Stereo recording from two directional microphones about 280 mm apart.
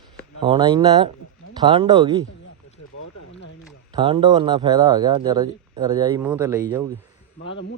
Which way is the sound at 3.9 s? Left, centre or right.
Centre.